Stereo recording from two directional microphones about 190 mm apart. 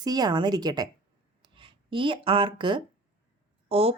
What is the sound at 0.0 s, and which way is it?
Speech, 20° right (ahead or behind).